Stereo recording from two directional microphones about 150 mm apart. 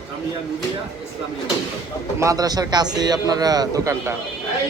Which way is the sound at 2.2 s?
25° right (ahead or behind).